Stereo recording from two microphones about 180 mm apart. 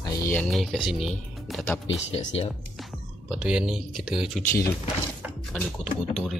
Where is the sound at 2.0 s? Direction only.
35° left (ahead or behind).